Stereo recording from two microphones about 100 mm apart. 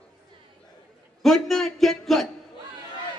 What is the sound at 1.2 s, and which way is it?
A man's voice, centre (ahead or behind).